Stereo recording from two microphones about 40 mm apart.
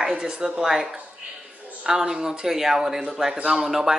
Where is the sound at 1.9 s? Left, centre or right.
Centre.